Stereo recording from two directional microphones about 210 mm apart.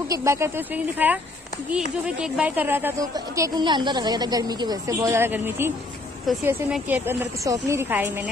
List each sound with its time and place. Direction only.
0.1 s a woman's voice: 15° right (ahead or behind)
2.2 s a woman's voice: 5° right (ahead or behind)